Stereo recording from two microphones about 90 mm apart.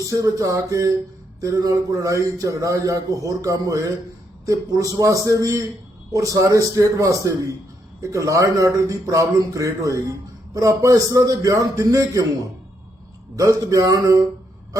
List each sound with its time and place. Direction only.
0.1 s a man's voice: 40° right (ahead or behind)